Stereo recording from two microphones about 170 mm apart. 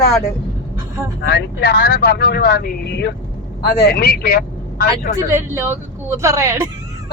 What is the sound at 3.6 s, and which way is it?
Speech, 65° left (ahead or behind).